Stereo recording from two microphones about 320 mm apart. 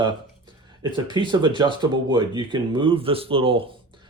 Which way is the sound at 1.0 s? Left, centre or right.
Centre.